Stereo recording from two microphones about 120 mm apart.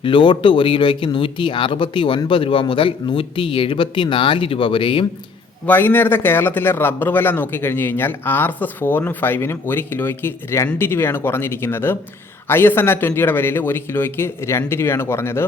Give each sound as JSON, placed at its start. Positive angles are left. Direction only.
{"t": 0.0, "sound": "speech", "side_deg": 45}
{"t": 5.6, "sound": "a man's voice", "side_deg": 15}